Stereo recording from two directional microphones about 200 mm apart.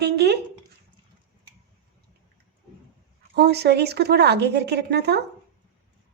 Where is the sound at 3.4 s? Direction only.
55° right (ahead or behind).